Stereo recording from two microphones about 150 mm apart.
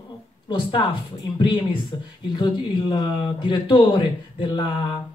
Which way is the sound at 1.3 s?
30° left (ahead or behind).